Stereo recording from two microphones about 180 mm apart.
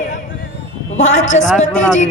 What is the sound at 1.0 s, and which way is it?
Speech, 40° left (ahead or behind).